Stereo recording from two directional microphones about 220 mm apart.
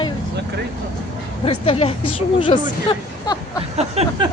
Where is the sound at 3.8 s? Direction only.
30° right (ahead or behind).